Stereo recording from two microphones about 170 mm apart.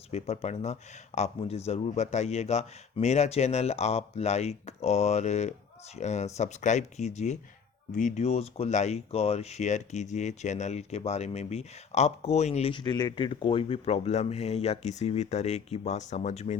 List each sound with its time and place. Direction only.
0.1 s speech: 40° left (ahead or behind)